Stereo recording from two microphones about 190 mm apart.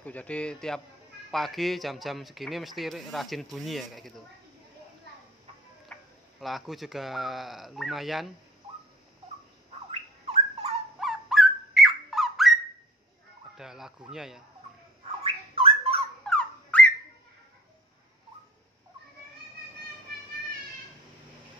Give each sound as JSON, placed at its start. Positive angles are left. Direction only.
{"t": 0.0, "sound": "speech", "side_deg": 5}
{"t": 5.9, "sound": "tick-tock", "side_deg": 5}
{"t": 6.4, "sound": "speech", "side_deg": 0}
{"t": 9.8, "sound": "bird", "side_deg": -35}
{"t": 11.0, "sound": "squawk", "side_deg": 0}
{"t": 13.6, "sound": "speech", "side_deg": 0}
{"t": 15.2, "sound": "bird", "side_deg": -30}
{"t": 16.3, "sound": "a sound", "side_deg": 5}